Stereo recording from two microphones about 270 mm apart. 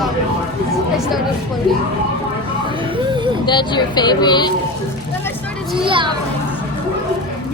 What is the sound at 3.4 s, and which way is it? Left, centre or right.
Speech, centre.